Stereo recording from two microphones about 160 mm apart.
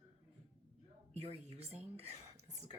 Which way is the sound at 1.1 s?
40° right (ahead or behind).